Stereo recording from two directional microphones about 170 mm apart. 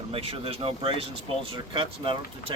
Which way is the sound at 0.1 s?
35° right (ahead or behind).